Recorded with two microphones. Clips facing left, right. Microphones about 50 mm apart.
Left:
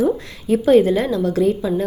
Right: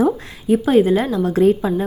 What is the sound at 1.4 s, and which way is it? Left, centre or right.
Speech, right.